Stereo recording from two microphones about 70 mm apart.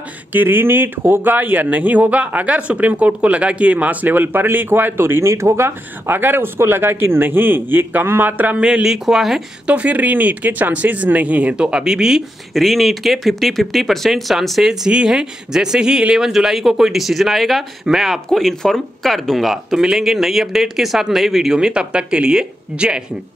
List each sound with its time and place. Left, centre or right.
0.3 s speech: right
8.6 s speech: centre
9.7 s speech: centre